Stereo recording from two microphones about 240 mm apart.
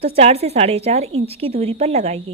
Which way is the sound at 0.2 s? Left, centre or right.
Right.